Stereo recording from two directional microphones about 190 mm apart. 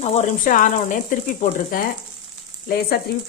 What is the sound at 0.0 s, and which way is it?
Speech, 35° left (ahead or behind).